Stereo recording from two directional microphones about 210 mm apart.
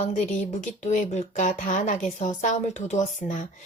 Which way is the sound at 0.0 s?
35° left (ahead or behind).